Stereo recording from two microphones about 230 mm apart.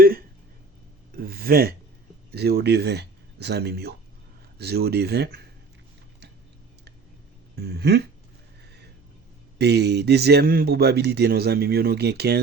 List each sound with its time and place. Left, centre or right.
0.0 s a sound: right
2.3 s a man's voice: right
7.5 s a man's voice: right
9.6 s a man's voice: right